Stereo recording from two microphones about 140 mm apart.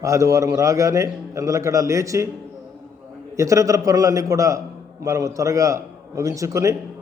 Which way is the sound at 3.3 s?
20° right (ahead or behind).